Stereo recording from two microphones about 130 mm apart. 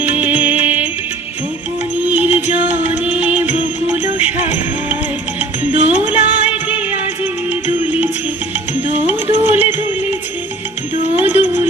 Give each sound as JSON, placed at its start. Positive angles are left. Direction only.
{"t": 0.0, "sound": "music", "side_deg": -15}
{"t": 2.0, "sound": "music", "side_deg": -10}
{"t": 5.9, "sound": "music", "side_deg": -10}
{"t": 9.0, "sound": "music", "side_deg": -15}
{"t": 11.1, "sound": "music", "side_deg": -15}